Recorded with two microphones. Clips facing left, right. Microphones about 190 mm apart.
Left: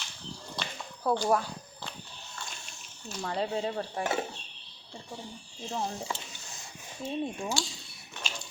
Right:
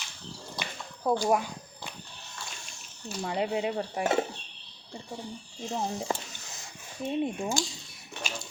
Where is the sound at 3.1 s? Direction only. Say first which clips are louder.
Right 2 dB; 15° right (ahead or behind).